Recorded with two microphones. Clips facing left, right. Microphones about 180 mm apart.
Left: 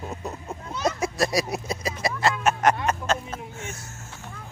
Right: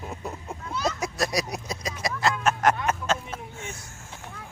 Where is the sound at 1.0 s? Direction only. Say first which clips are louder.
Left 3 dB; centre (ahead or behind); by 4.2 s 15° right (ahead or behind).